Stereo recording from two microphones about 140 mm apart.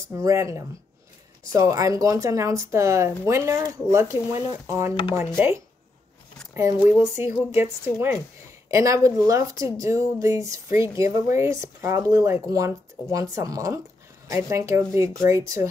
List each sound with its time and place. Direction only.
0.1 s speech: 20° right (ahead or behind)